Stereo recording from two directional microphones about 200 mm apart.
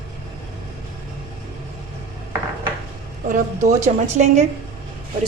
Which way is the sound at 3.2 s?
40° right (ahead or behind).